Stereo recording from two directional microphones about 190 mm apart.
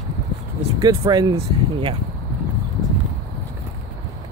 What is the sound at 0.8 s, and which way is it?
Speech, 20° right (ahead or behind).